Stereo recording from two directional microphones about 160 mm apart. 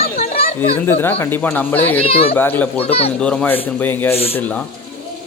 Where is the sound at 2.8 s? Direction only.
40° left (ahead or behind).